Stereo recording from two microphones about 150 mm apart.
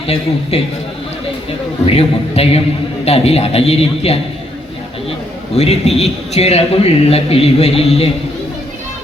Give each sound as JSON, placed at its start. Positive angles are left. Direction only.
{"t": 0.5, "sound": "a man's voice", "side_deg": 45}
{"t": 1.8, "sound": "a man's voice", "side_deg": 40}
{"t": 5.5, "sound": "a man's voice", "side_deg": 45}